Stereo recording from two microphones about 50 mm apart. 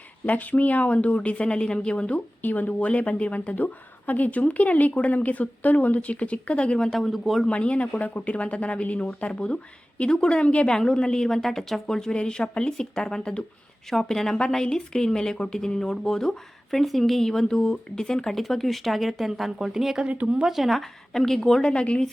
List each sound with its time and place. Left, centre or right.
0.3 s a woman's voice: left
2.4 s a woman's voice: left; by 7.4 s centre
7.4 s a woman's voice: left
18.3 s speech: centre
20.1 s speech: right
20.3 s speech: centre
20.6 s speech: centre
21.6 s a woman's voice: left